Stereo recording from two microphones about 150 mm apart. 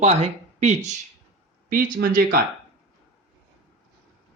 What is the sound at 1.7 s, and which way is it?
Speech, 75° right (ahead or behind).